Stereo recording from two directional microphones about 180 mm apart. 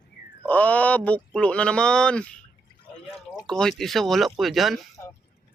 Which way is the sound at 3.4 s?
5° left (ahead or behind).